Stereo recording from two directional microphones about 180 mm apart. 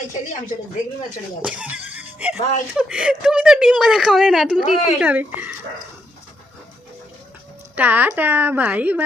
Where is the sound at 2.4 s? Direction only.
40° left (ahead or behind).